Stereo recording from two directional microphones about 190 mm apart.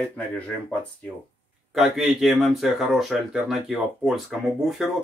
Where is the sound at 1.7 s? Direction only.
Centre (ahead or behind).